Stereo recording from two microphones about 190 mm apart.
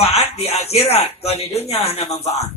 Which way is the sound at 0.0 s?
35° left (ahead or behind).